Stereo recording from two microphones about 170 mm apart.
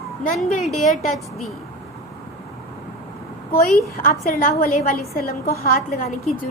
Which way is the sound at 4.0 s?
60° left (ahead or behind).